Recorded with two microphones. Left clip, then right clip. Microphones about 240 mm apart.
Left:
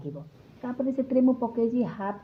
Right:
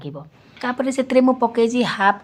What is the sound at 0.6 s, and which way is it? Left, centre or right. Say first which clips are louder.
Speech: right 8 dB; right.